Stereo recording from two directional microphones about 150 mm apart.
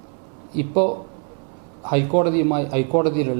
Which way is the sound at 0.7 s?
15° right (ahead or behind).